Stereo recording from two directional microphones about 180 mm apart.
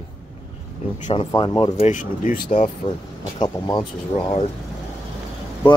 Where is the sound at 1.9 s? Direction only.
45° left (ahead or behind).